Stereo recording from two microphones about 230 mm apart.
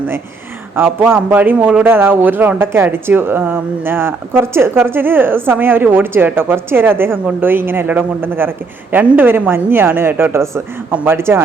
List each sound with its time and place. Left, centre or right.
0.8 s a man's voice: centre